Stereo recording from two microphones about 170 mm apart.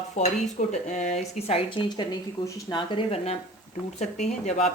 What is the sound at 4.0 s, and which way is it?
Speech, 45° left (ahead or behind).